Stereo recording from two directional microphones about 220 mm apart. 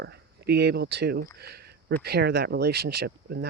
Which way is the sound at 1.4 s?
45° right (ahead or behind).